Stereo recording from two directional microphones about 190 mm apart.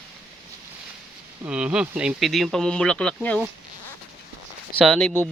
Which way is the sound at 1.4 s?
5° right (ahead or behind).